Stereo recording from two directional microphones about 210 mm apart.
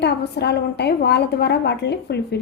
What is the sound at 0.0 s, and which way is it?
A woman's voice, 55° left (ahead or behind).